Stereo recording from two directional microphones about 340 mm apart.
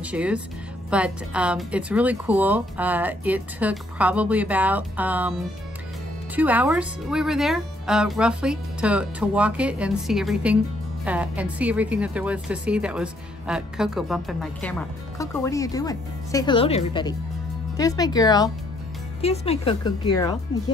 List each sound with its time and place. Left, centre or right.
0.0 s a woman's voice: centre
6.3 s a woman's voice: centre